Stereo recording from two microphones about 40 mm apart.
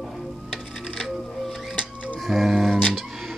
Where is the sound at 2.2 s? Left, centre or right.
Centre.